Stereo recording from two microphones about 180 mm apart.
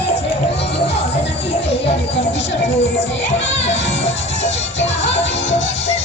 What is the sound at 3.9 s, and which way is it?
Music, 40° left (ahead or behind).